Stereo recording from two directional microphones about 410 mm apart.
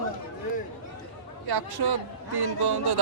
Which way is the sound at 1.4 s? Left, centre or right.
Right.